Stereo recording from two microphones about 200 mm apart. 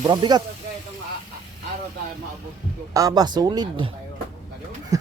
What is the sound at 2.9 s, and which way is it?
Speech, 15° right (ahead or behind).